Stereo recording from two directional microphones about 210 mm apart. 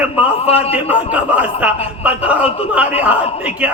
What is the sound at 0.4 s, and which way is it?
Speech, 30° left (ahead or behind).